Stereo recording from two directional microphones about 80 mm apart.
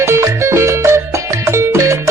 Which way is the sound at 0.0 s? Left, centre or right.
Right.